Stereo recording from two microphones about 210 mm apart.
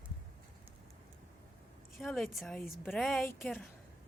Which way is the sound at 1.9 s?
Centre (ahead or behind).